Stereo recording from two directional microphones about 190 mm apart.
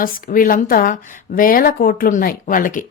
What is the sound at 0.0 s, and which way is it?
A woman's voice, 45° left (ahead or behind).